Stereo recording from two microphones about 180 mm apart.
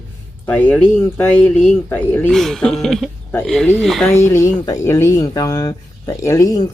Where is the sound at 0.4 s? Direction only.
10° left (ahead or behind).